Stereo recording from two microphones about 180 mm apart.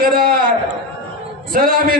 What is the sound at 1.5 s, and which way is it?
Speech, 55° right (ahead or behind).